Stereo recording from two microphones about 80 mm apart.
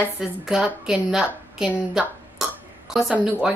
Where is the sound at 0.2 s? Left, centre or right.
Centre.